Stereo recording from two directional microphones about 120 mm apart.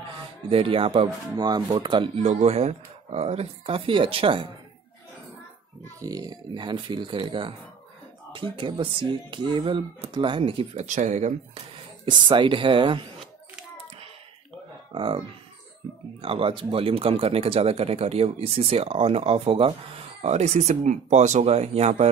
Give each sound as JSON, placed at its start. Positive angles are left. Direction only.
{"t": 0.5, "sound": "speech", "side_deg": -50}
{"t": 1.3, "sound": "speech", "side_deg": -30}
{"t": 2.1, "sound": "speech", "side_deg": -65}
{"t": 5.9, "sound": "speech", "side_deg": -30}
{"t": 10.9, "sound": "speech", "side_deg": -85}
{"t": 11.5, "sound": "speech", "side_deg": -40}
{"t": 14.9, "sound": "speech", "side_deg": -45}